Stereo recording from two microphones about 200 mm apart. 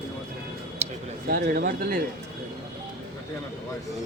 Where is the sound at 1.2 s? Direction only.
50° right (ahead or behind).